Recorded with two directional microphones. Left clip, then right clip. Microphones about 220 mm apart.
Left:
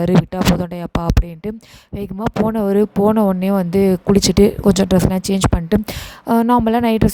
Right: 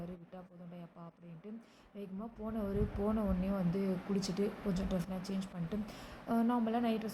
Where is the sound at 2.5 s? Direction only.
45° left (ahead or behind).